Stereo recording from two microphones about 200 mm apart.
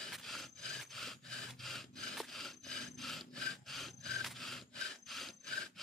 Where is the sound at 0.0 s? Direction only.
Centre (ahead or behind).